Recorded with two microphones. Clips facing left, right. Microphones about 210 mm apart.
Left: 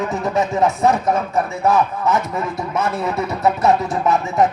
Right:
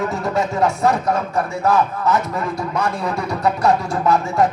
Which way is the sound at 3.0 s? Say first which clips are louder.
Left 1 dB; 20° left (ahead or behind).